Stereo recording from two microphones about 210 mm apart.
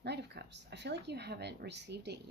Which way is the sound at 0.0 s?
55° right (ahead or behind).